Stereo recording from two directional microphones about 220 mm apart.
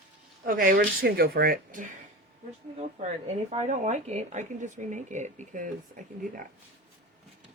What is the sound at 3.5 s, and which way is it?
Speech, 30° right (ahead or behind).